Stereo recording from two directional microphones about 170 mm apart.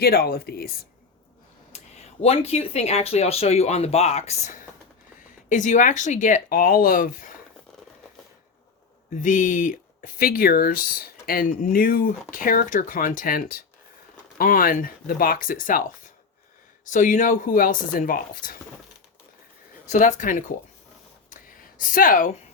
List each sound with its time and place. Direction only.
0.0 s speech: 60° left (ahead or behind)
1.7 s speech: 40° left (ahead or behind); by 7.3 s 55° left (ahead or behind)
9.2 s speech: 50° left (ahead or behind)
16.9 s speech: 50° left (ahead or behind)
19.9 s speech: 45° left (ahead or behind)
21.2 s a sound: 55° left (ahead or behind)